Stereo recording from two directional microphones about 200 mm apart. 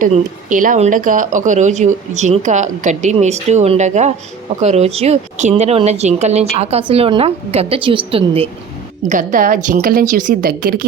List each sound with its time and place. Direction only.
0.0 s speech: 40° right (ahead or behind)
9.0 s speech: 40° right (ahead or behind)